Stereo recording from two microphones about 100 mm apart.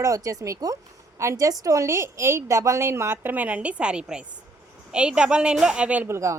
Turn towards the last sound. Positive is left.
turn(degrees=-30)  # may be behind; listen again after turning